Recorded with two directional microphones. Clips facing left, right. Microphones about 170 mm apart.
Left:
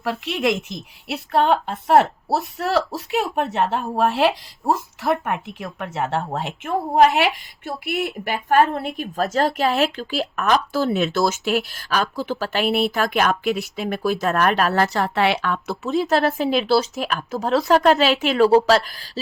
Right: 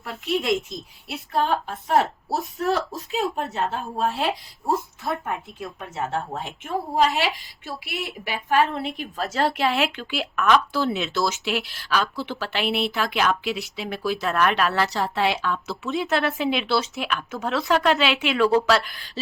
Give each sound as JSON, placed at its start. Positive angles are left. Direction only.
{"t": 1.0, "sound": "a woman's voice", "side_deg": 70}
{"t": 14.9, "sound": "speech", "side_deg": 60}
{"t": 15.9, "sound": "speech", "side_deg": 40}